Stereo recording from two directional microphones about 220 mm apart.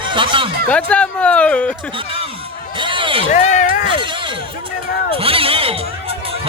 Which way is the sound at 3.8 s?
20° right (ahead or behind).